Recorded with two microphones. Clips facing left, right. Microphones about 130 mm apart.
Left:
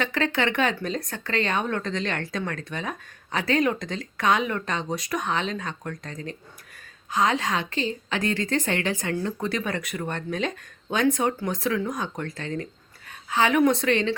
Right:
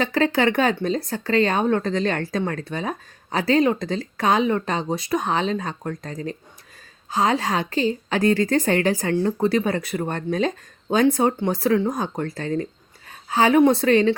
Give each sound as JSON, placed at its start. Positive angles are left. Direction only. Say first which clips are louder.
{"t": 0.0, "sound": "a woman's voice", "louder": "right 5 dB", "side_deg": -35}